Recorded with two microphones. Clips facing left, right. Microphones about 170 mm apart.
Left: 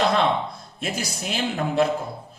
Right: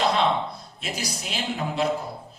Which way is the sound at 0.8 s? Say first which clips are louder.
Left 4 dB; 50° left (ahead or behind).